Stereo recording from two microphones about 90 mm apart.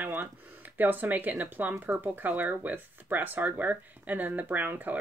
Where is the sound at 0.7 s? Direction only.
20° right (ahead or behind).